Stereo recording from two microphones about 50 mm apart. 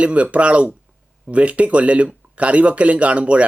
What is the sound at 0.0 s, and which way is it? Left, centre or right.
Speech, right.